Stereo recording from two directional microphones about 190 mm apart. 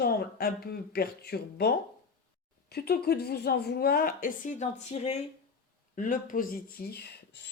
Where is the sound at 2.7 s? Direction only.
55° left (ahead or behind).